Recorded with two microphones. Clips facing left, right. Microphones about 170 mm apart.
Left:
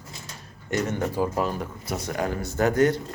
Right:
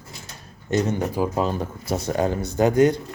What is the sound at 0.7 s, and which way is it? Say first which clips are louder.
Speech: right 3 dB; 20° right (ahead or behind).